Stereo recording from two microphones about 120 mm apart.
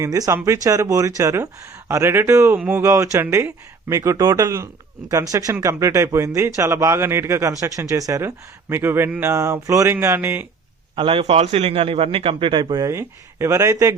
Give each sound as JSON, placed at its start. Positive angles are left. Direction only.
{"t": 0.0, "sound": "speech", "side_deg": -25}
{"t": 10.9, "sound": "a man's voice", "side_deg": -50}